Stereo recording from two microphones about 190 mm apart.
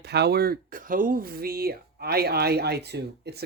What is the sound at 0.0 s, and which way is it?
Speech, 60° right (ahead or behind).